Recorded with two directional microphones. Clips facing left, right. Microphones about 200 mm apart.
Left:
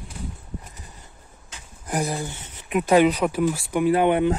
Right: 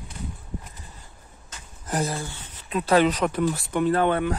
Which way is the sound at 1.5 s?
15° left (ahead or behind).